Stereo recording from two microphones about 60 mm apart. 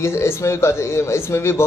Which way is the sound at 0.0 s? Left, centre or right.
Left.